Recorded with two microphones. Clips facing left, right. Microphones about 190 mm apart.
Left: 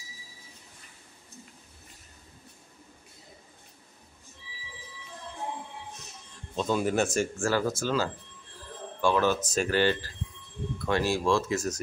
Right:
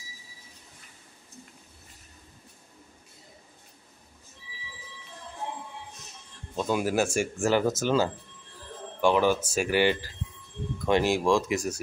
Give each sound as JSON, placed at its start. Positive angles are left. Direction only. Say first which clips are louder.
{"t": 6.5, "sound": "speech", "louder": "even", "side_deg": -10}